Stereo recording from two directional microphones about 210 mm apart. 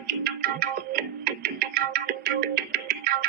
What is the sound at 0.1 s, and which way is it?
Music, 45° right (ahead or behind).